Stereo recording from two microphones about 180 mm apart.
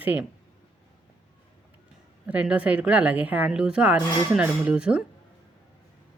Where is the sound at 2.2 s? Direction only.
5° right (ahead or behind).